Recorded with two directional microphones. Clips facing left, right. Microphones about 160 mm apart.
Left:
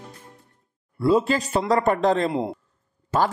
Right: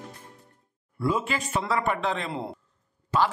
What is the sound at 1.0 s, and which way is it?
A man's voice, 35° left (ahead or behind).